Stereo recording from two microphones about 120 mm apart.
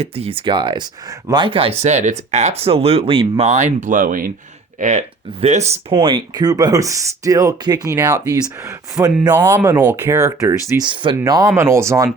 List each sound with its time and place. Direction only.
0.0 s speech: 55° right (ahead or behind)
3.4 s speech: 75° right (ahead or behind)
4.8 s speech: 70° right (ahead or behind)
5.9 s speech: 45° right (ahead or behind); by 9.1 s 30° right (ahead or behind)
9.1 s speech: 15° right (ahead or behind)
10.8 s speech: 40° right (ahead or behind)
11.2 s speech: 30° right (ahead or behind)